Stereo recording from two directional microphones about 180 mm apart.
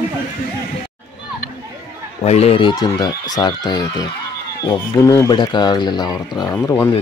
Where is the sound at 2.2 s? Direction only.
35° left (ahead or behind); by 6.9 s 15° left (ahead or behind).